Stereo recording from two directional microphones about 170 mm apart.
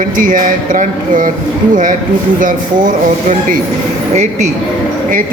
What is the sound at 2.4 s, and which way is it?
Speech, 50° right (ahead or behind).